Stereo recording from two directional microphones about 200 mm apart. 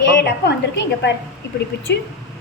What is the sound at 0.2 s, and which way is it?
Speech, 55° left (ahead or behind).